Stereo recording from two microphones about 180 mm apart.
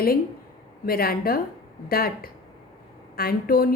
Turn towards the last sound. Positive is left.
turn(degrees=55)  # may be behind; listen again after turning